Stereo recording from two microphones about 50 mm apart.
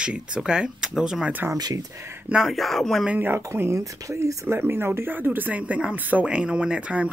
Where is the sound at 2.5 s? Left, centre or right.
Centre.